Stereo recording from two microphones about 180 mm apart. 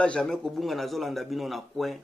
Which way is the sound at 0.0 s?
5° left (ahead or behind).